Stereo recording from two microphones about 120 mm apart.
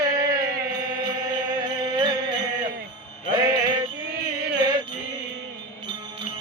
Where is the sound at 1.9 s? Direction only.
35° right (ahead or behind).